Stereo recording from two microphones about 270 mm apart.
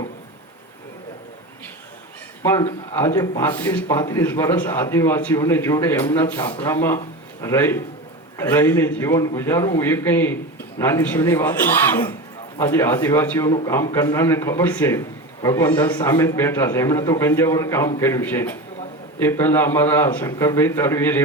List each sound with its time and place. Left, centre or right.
2.4 s a man's voice: centre